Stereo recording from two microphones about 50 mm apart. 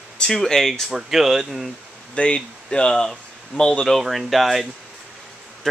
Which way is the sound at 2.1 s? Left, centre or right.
Left.